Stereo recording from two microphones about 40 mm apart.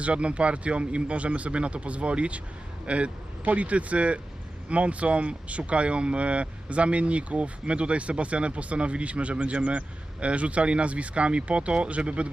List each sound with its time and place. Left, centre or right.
0.0 s speech: right